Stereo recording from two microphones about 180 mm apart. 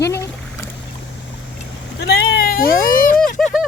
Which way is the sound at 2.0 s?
65° left (ahead or behind).